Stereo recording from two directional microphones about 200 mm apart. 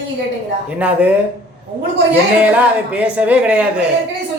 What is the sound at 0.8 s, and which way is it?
Speech, 5° right (ahead or behind).